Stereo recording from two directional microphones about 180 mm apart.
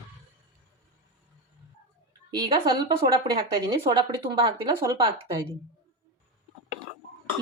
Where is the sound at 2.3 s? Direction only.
20° right (ahead or behind).